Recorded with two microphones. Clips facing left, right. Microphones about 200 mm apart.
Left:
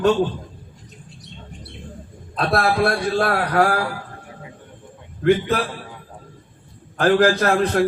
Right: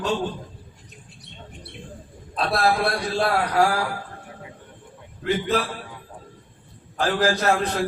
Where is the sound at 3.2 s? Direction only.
55° left (ahead or behind).